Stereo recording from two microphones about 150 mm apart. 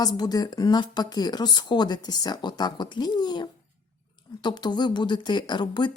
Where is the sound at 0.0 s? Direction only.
25° left (ahead or behind).